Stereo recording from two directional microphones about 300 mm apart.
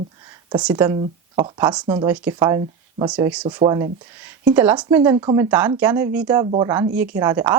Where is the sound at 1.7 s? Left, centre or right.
Centre.